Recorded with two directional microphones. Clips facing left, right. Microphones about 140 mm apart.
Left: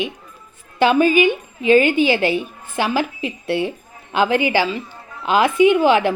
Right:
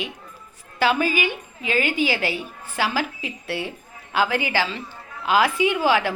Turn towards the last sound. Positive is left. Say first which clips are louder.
# left 6 dB
turn(degrees=20)  # may be behind; listen again after turning